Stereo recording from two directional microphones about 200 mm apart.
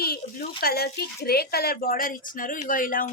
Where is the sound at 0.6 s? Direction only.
50° left (ahead or behind).